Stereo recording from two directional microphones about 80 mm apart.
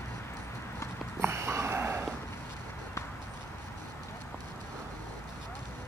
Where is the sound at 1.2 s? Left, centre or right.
Right.